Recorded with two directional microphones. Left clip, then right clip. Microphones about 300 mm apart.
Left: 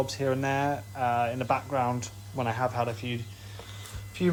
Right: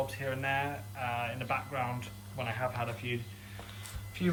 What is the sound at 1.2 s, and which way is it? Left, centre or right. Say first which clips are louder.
Speech: left 7 dB; centre.